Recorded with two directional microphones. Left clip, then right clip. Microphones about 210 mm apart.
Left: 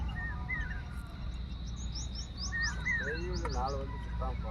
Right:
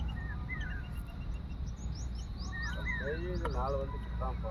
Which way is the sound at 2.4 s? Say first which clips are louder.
Left 5 dB; 45° right (ahead or behind).